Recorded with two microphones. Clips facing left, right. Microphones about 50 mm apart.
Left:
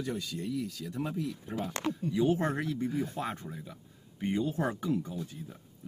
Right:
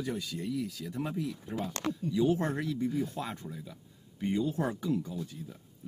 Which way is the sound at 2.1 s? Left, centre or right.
Left.